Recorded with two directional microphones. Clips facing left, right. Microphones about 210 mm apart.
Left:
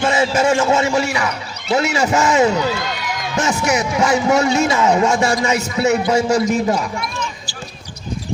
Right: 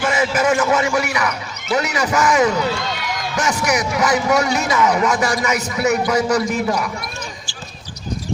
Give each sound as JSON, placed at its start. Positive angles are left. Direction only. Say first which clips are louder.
{"t": 0.0, "sound": "a man's voice", "louder": "left 2 dB", "side_deg": 25}